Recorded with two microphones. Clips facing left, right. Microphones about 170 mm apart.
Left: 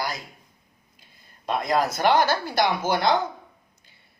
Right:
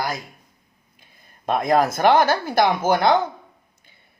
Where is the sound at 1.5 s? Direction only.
50° right (ahead or behind).